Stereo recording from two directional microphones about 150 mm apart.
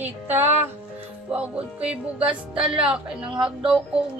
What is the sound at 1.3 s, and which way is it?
Speech, 10° right (ahead or behind).